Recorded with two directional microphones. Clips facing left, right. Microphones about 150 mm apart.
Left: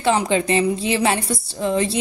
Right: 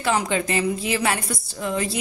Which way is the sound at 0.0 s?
25° left (ahead or behind).